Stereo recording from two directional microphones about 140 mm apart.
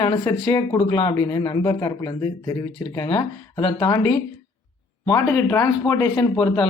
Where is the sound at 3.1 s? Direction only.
35° left (ahead or behind).